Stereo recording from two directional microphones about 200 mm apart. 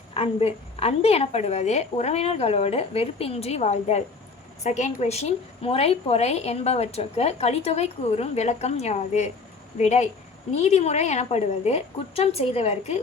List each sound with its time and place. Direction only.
0.1 s a woman's voice: 30° left (ahead or behind)